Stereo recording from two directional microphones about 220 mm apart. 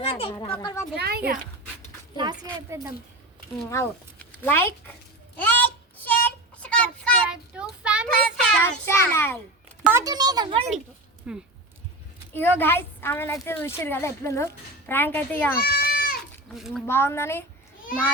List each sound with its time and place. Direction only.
0.0 s speech: 25° left (ahead or behind)
0.5 s a woman's voice: 15° left (ahead or behind)
0.9 s speech: 45° right (ahead or behind)
2.1 s a woman's voice: 20° right (ahead or behind)
4.4 s a woman's voice: 10° left (ahead or behind)
5.4 s a sound: 10° left (ahead or behind)
9.8 s a child's voice: 15° right (ahead or behind)
11.3 s speech: 5° right (ahead or behind)
12.3 s a woman's voice: 10° left (ahead or behind)
15.6 s goat: 45° left (ahead or behind)
16.5 s speech: centre (ahead or behind)
16.8 s a woman's voice: 10° left (ahead or behind)